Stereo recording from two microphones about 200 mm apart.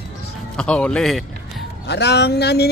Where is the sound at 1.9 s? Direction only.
55° left (ahead or behind).